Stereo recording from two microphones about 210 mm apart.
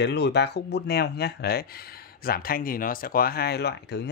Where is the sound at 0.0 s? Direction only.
55° left (ahead or behind).